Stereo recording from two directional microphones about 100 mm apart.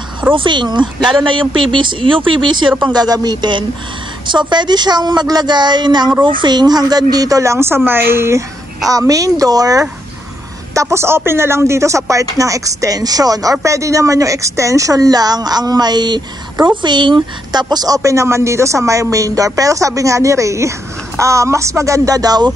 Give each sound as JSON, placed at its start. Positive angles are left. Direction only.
{"t": 0.3, "sound": "a woman's voice", "side_deg": -55}